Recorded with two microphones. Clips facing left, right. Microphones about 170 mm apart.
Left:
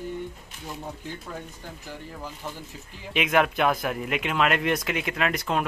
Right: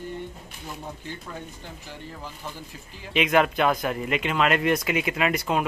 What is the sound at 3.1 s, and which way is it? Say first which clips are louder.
Speech: right 2 dB; centre (ahead or behind).